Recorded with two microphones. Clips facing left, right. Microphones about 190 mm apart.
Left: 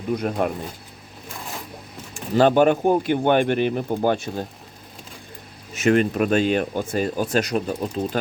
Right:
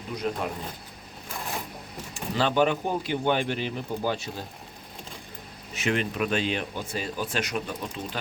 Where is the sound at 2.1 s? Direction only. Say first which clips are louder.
Left 9 dB; 50° left (ahead or behind).